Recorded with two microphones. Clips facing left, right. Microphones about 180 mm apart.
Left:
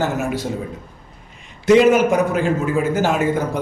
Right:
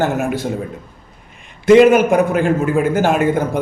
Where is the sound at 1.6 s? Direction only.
55° right (ahead or behind).